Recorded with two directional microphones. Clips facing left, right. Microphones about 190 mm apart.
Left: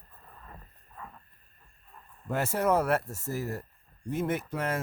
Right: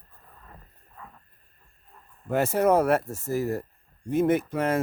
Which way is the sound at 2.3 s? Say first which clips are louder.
Right 5 dB; 20° right (ahead or behind).